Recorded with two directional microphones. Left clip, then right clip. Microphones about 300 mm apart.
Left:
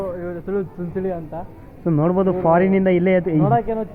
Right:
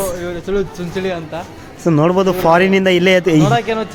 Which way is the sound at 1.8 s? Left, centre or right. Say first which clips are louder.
Right 6 dB; right.